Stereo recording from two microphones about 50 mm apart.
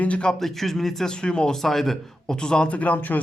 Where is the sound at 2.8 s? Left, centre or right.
Left.